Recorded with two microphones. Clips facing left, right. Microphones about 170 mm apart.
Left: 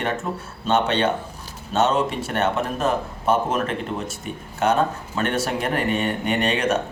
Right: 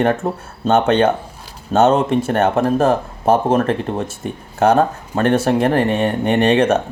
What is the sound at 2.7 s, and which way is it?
Speech, 35° right (ahead or behind).